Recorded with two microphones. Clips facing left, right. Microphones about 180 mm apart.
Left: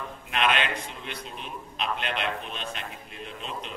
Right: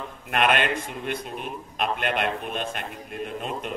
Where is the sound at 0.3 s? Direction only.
50° right (ahead or behind).